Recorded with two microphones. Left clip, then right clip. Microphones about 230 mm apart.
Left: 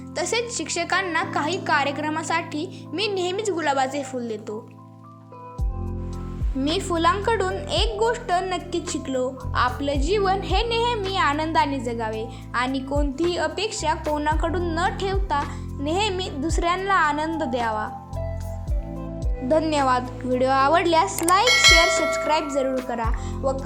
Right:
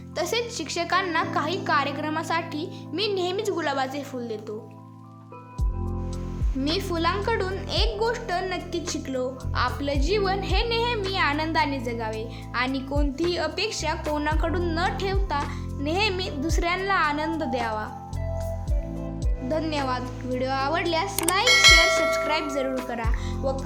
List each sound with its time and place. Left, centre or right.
0.2 s a woman's voice: centre
6.6 s a woman's voice: centre
19.5 s a woman's voice: centre
21.4 s a woman's voice: centre